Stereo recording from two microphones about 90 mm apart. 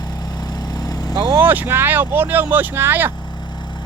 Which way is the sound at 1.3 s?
20° right (ahead or behind).